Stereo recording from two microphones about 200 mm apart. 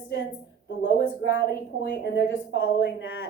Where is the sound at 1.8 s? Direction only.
60° left (ahead or behind).